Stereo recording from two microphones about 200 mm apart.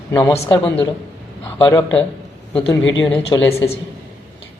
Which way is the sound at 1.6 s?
5° left (ahead or behind).